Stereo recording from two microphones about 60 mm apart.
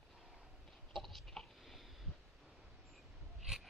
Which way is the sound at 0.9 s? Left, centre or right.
Centre.